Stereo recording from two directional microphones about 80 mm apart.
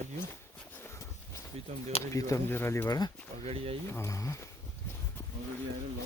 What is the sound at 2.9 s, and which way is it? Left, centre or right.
Speech, left.